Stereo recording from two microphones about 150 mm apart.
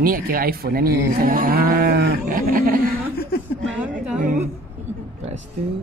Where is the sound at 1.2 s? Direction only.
70° right (ahead or behind).